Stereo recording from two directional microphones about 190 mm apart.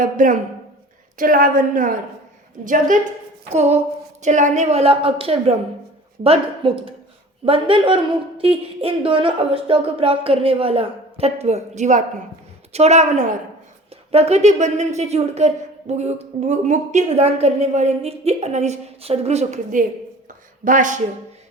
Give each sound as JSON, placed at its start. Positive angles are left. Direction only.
{"t": 0.0, "sound": "a woman's voice", "side_deg": -45}